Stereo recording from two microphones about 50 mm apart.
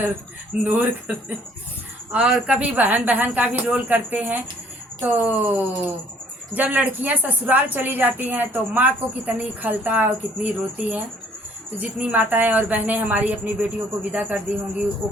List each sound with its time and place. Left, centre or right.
0.6 s a woman's voice: right
2.1 s speech: right
2.8 s a woman's voice: right